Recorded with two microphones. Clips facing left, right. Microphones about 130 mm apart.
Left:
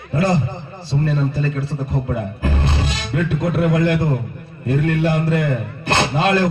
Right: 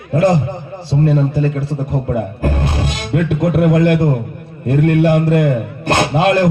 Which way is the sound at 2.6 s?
10° right (ahead or behind).